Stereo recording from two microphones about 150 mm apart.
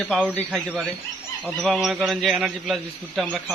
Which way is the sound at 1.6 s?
Centre (ahead or behind).